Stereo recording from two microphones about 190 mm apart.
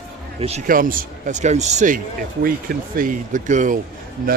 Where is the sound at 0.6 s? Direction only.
45° right (ahead or behind).